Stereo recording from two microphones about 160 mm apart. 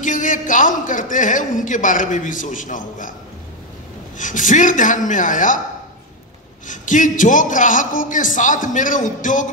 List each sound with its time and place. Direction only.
0.0 s a man's voice: 55° left (ahead or behind)
4.2 s a man's voice: 55° left (ahead or behind)
6.7 s a man's voice: 55° left (ahead or behind)